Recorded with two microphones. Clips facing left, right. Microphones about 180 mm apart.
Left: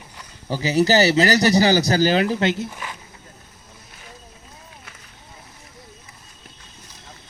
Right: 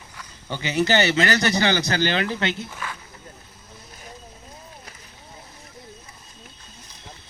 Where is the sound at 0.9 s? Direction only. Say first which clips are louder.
Left 3 dB; 40° left (ahead or behind).